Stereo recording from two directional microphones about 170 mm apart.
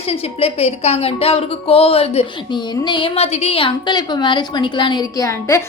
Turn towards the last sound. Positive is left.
turn(degrees=20)  # may be behind; listen again after turning